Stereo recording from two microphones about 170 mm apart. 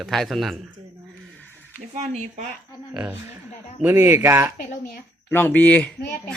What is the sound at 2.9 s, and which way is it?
A man's voice, 10° right (ahead or behind).